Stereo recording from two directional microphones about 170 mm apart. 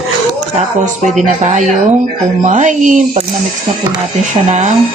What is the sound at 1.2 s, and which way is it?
A woman's voice, 45° right (ahead or behind).